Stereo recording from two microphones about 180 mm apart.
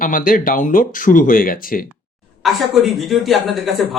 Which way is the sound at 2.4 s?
Centre (ahead or behind).